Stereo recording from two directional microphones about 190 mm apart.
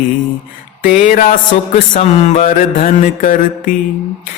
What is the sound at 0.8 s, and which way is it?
Mantra, 40° left (ahead or behind).